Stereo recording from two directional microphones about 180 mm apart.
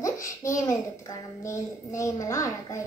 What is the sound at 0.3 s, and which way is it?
A child's voice, 15° left (ahead or behind).